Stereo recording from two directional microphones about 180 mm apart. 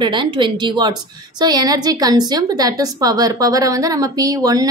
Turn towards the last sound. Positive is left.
turn(degrees=-20)  # may be behind; listen again after turning